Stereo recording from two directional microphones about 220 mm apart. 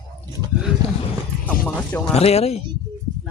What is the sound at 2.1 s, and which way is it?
Speech, 30° left (ahead or behind).